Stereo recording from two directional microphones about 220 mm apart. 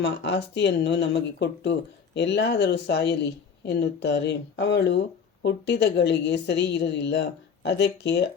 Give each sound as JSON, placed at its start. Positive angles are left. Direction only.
{"t": 0.0, "sound": "a woman's voice", "side_deg": 50}